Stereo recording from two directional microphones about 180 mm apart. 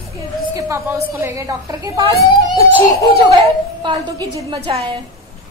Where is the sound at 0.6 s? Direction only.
15° right (ahead or behind).